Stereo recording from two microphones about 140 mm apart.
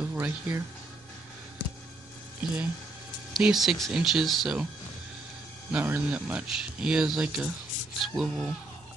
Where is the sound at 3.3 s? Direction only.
Centre (ahead or behind).